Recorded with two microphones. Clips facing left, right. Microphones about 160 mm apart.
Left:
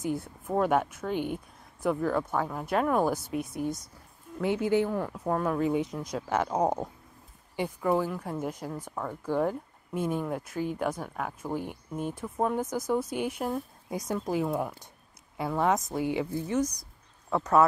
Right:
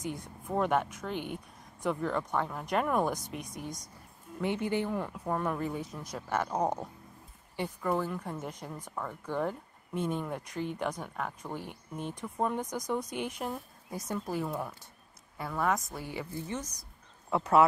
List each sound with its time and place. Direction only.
0.0 s speech: 5° left (ahead or behind)
1.1 s speech: 50° left (ahead or behind)
1.8 s speech: 5° left (ahead or behind)
5.7 s speech: 15° left (ahead or behind)
15.3 s a woman's voice: 20° left (ahead or behind)